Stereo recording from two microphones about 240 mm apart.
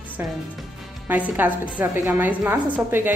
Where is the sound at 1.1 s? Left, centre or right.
Centre.